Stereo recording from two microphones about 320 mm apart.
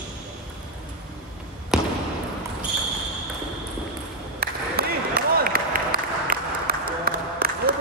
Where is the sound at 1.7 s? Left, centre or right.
Centre.